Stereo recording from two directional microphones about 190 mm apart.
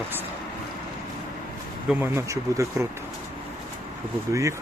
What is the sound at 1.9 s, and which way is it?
Speech, 15° right (ahead or behind).